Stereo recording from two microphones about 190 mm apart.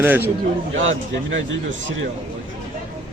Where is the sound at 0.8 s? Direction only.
90° right.